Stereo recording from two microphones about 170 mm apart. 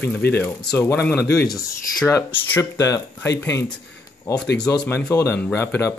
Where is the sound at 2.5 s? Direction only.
15° left (ahead or behind).